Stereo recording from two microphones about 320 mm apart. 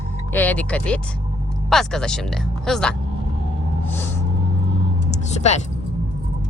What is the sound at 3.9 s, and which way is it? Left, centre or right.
Vehicle, centre.